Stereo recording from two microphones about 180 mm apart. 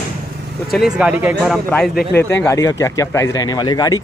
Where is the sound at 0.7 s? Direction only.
5° right (ahead or behind).